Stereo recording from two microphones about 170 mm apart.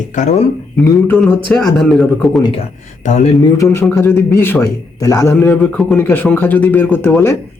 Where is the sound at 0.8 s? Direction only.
15° left (ahead or behind).